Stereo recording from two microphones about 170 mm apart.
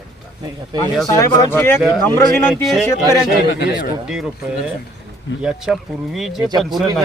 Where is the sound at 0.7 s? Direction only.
25° right (ahead or behind).